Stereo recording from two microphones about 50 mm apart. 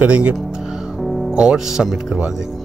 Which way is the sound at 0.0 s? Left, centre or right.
Right.